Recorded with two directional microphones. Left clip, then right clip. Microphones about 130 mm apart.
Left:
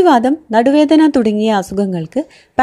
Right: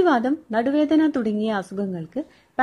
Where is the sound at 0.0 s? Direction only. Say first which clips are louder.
Left 9 dB; 35° left (ahead or behind).